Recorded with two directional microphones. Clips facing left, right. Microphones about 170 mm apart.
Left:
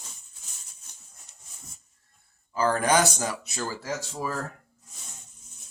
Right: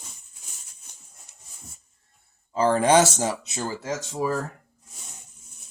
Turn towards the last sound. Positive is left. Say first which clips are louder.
# right 5 dB
turn(degrees=-20)  # may be behind; listen again after turning